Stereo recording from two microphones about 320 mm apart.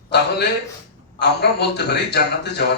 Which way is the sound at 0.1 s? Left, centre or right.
Left.